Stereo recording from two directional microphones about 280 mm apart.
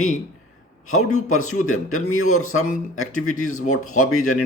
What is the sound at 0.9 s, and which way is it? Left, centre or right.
A man's voice, left.